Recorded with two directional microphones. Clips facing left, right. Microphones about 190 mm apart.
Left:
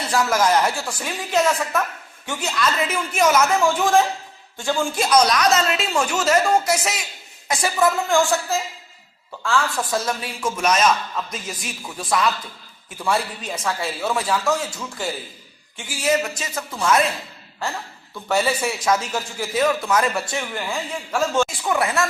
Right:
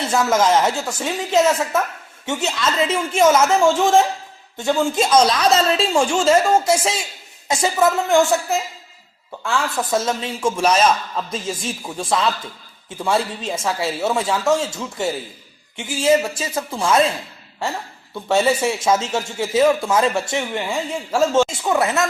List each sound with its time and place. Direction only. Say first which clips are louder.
0.0 s a man's voice: right 2 dB; 25° right (ahead or behind)
18.1 s a man's voice: right 4 dB; 25° right (ahead or behind)